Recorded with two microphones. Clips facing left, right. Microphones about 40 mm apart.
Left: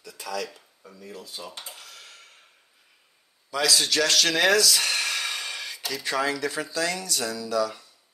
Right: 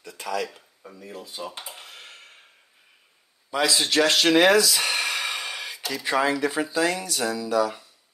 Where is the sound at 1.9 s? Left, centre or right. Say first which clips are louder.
Right 3 dB; right.